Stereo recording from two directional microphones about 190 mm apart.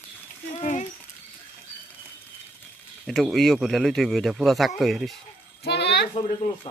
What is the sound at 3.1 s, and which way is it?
Speech, centre (ahead or behind).